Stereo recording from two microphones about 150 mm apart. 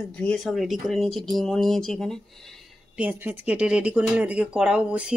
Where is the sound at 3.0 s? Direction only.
10° right (ahead or behind).